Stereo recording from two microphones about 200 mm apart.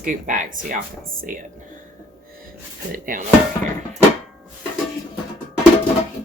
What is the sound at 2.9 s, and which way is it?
Speech, 45° right (ahead or behind).